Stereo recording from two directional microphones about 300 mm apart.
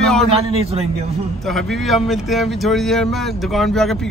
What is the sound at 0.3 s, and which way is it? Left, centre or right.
Speech, centre.